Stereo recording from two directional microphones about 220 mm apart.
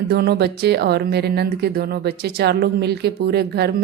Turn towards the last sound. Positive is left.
turn(degrees=-45)  # may be behind; listen again after turning